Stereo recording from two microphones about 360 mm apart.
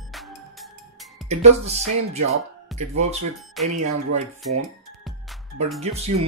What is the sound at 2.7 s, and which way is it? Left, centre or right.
Music, centre.